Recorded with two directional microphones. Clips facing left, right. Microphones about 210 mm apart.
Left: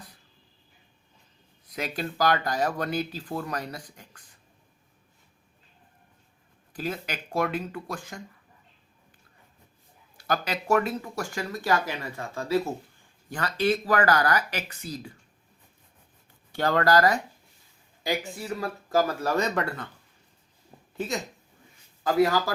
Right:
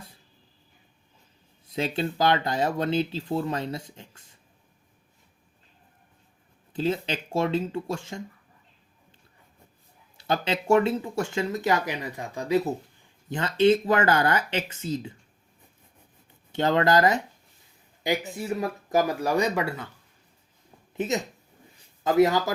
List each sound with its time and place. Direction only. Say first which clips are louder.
1.6 s speech: right 5 dB; 25° right (ahead or behind)
6.7 s speech: right 6 dB; 25° right (ahead or behind)
10.2 s speech: right 2 dB; 25° right (ahead or behind)
16.5 s speech: right 1 dB; 20° right (ahead or behind)
18.3 s speech: right 3 dB; 20° right (ahead or behind)
20.9 s speech: right 4 dB; 20° right (ahead or behind)